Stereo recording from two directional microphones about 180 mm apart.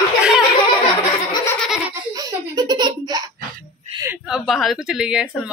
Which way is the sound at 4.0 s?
10° right (ahead or behind).